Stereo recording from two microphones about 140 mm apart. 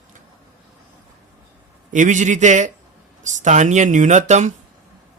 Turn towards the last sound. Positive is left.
turn(degrees=-60)  # may be behind; listen again after turning